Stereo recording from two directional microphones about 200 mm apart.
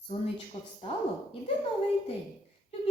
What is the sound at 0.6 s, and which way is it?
Speech, 25° left (ahead or behind).